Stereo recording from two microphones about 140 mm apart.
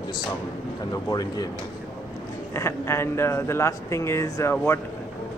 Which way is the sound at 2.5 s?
20° left (ahead or behind).